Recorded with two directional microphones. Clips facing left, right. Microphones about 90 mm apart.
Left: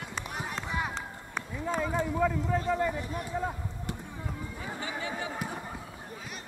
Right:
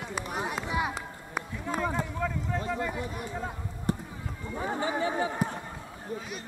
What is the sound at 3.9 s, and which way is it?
Basketball bounce, 35° right (ahead or behind).